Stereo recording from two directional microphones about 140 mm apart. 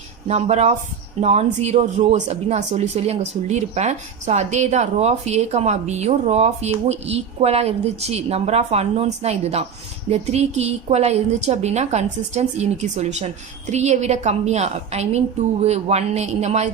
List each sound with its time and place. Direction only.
0.3 s speech: 50° right (ahead or behind)